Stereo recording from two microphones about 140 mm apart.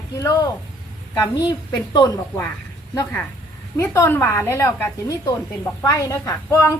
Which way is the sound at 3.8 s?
20° left (ahead or behind).